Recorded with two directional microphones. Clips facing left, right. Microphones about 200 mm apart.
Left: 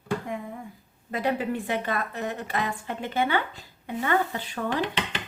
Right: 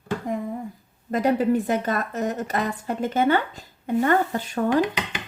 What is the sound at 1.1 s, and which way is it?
A woman's voice, 40° right (ahead or behind).